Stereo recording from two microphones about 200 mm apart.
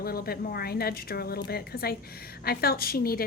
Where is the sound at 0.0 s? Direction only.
50° left (ahead or behind).